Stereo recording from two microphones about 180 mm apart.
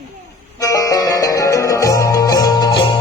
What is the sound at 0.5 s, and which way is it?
Music, 20° left (ahead or behind).